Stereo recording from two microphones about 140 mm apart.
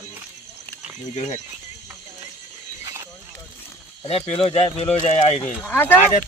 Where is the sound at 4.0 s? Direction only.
45° left (ahead or behind).